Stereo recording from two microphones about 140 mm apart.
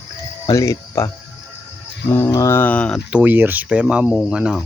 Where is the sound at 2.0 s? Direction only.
15° left (ahead or behind).